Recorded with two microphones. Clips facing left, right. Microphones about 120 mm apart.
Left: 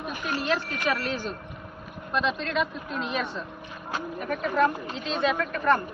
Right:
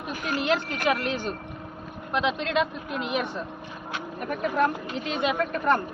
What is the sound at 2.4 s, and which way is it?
Speech, 70° right (ahead or behind).